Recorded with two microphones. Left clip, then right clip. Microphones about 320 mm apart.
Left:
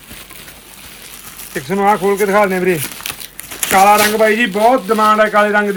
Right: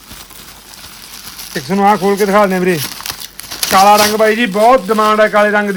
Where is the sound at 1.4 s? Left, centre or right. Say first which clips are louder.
Right 2 dB; right.